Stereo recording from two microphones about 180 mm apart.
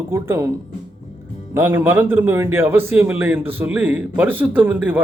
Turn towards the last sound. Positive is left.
turn(degrees=-10)  # may be behind; listen again after turning